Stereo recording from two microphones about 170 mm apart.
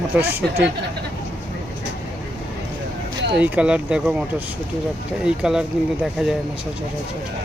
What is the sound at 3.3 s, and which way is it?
Speech, 10° right (ahead or behind).